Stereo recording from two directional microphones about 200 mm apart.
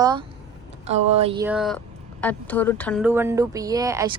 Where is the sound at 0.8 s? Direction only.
30° right (ahead or behind).